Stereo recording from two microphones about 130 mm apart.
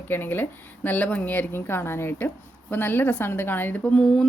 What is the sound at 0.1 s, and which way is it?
A woman's voice, 15° left (ahead or behind).